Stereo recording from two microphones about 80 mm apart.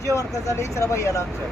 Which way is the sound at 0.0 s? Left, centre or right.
Left.